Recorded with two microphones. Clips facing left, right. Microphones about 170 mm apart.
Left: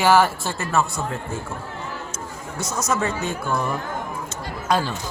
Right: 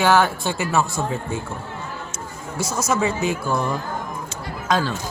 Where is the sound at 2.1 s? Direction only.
Centre (ahead or behind).